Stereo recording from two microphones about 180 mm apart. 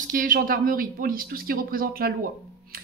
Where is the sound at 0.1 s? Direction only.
50° right (ahead or behind).